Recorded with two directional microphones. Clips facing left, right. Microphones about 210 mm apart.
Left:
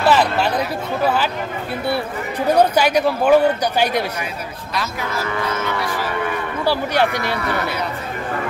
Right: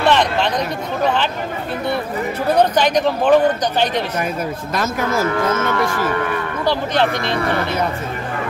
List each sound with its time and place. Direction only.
0.0 s speech: 5° left (ahead or behind)
2.4 s speech: 10° left (ahead or behind)
4.7 s speech: 50° right (ahead or behind)
6.6 s speech: 10° left (ahead or behind)